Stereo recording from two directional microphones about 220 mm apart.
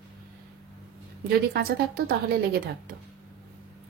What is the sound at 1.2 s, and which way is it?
A woman's voice, 45° right (ahead or behind).